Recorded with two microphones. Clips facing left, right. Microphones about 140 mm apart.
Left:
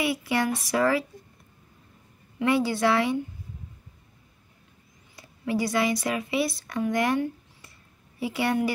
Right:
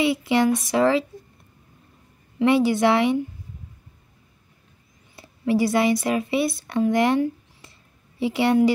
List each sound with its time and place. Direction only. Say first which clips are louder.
0.0 s speech: right 6 dB; 25° right (ahead or behind)
2.3 s speech: right 5 dB; 20° right (ahead or behind)
5.1 s speech: right 6 dB; 25° right (ahead or behind)